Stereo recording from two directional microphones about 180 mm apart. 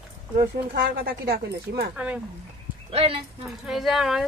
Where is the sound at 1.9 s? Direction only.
10° right (ahead or behind).